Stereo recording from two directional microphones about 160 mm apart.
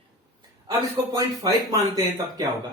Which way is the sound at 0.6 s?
20° right (ahead or behind).